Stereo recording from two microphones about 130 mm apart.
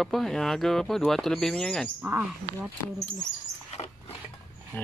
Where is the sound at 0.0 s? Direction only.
5° left (ahead or behind).